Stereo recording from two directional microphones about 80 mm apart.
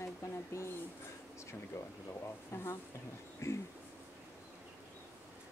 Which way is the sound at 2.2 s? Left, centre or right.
Left.